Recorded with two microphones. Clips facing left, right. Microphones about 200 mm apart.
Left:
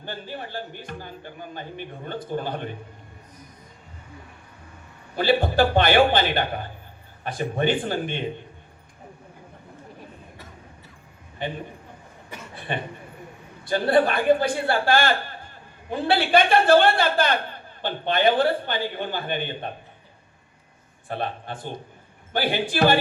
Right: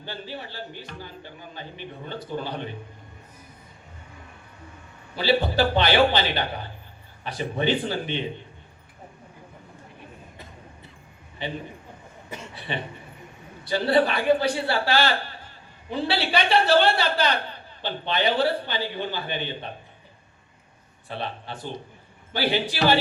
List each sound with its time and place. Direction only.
0.0 s a woman's voice: 50° left (ahead or behind)
5.1 s a woman's voice: 50° left (ahead or behind)
11.4 s a woman's voice: 50° left (ahead or behind)
12.5 s chuckle: 50° left (ahead or behind)
13.7 s a woman's voice: 50° left (ahead or behind)
21.1 s a woman's voice: 50° left (ahead or behind)